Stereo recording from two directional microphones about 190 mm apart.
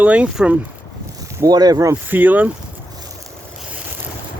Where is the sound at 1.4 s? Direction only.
20° right (ahead or behind).